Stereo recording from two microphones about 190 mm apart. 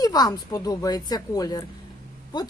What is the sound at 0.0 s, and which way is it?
A woman's voice, 20° left (ahead or behind).